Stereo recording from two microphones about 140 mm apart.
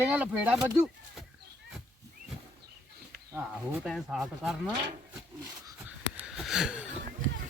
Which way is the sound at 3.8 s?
Centre (ahead or behind).